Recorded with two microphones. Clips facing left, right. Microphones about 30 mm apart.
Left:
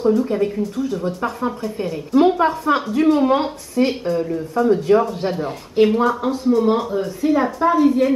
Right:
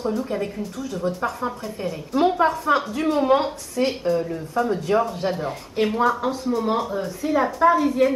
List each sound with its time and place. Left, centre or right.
0.0 s a woman's voice: centre